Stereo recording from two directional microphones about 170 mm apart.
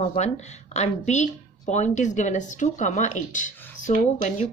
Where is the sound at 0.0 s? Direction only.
40° left (ahead or behind).